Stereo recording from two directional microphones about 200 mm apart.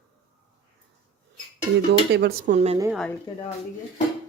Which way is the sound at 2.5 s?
30° right (ahead or behind).